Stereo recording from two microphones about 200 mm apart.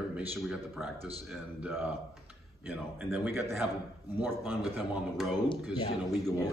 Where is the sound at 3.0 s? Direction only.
10° right (ahead or behind).